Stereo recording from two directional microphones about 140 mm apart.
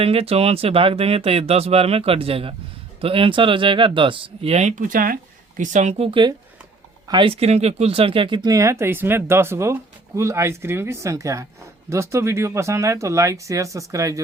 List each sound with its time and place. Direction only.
0.0 s speech: 45° right (ahead or behind); by 14.2 s 25° right (ahead or behind)